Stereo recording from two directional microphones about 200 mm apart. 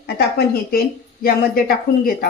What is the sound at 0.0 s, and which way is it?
Speech, 55° left (ahead or behind).